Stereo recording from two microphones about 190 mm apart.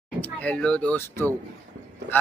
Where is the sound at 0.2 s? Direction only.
10° left (ahead or behind).